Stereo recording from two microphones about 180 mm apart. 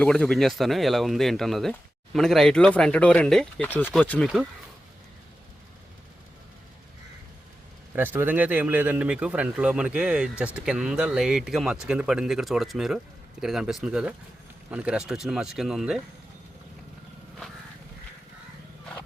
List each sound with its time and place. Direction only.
0.0 s speech: 5° left (ahead or behind)
7.9 s speech: 10° right (ahead or behind)